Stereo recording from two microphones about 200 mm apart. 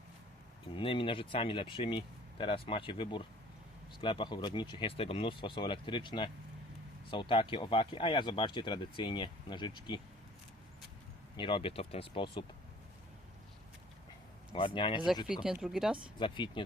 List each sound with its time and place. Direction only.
0.8 s speech: 25° left (ahead or behind)
11.3 s speech: 25° left (ahead or behind)
14.5 s speech: 25° left (ahead or behind)
15.3 s speech: 5° right (ahead or behind)
16.1 s speech: 25° left (ahead or behind)